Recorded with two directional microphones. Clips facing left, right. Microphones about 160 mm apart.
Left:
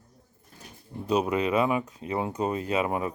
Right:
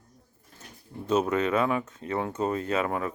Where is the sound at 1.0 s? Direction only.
15° left (ahead or behind).